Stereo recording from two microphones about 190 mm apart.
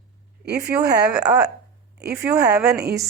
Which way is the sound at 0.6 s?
20° right (ahead or behind).